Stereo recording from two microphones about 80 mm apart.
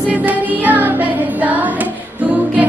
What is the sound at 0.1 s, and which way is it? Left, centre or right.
Music, right.